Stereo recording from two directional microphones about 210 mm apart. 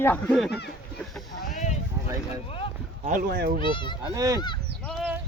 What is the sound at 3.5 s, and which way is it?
Speech, 25° left (ahead or behind).